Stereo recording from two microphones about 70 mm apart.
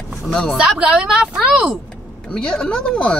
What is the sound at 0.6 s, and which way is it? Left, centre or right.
A woman's voice, centre.